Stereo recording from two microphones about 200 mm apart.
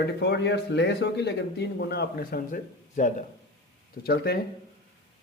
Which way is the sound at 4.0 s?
50° left (ahead or behind).